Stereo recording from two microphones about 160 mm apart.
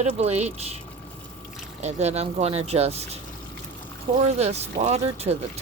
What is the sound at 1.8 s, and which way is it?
Speech, 45° right (ahead or behind).